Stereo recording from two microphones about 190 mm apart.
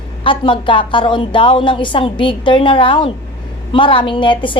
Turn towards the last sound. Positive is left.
turn(degrees=25)  # may be behind; listen again after turning